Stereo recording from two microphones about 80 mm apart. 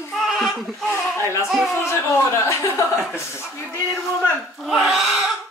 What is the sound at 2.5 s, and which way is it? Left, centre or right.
Chuckle, left.